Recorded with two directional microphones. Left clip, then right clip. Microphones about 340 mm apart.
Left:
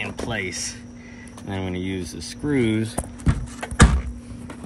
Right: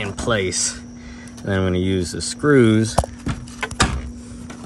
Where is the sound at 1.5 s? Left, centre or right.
Right.